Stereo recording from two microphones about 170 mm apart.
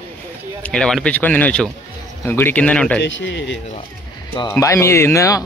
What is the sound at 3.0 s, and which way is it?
Speech, 90° left.